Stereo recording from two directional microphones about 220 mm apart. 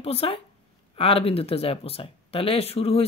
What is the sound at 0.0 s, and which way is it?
Speech, 25° left (ahead or behind).